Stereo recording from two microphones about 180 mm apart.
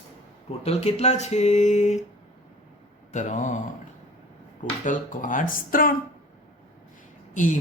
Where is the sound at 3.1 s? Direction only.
40° left (ahead or behind).